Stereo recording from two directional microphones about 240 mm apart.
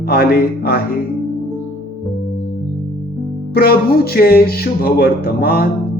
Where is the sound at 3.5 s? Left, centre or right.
Left.